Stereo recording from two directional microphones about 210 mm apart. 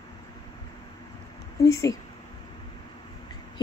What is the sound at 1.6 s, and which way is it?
Speech, 15° left (ahead or behind).